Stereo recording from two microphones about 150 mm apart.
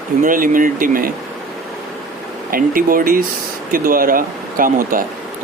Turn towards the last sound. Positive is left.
turn(degrees=-65)  # may be behind; listen again after turning